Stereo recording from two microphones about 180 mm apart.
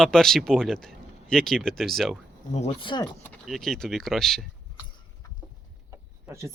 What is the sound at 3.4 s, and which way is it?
Speech, centre (ahead or behind).